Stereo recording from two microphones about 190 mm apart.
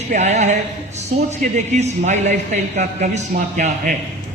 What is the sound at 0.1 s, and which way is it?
Speech, 40° right (ahead or behind).